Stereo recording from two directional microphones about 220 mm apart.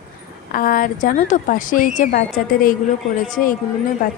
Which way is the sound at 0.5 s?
40° left (ahead or behind).